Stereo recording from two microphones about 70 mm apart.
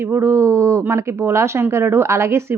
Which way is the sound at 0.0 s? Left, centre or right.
Right.